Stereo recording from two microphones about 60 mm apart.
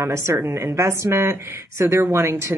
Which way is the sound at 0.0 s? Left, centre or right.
Right.